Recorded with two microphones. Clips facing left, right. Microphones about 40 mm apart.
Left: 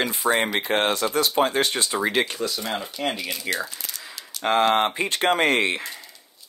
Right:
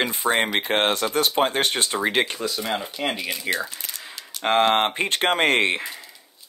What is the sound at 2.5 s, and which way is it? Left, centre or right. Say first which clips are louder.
Speech: right 2 dB; centre.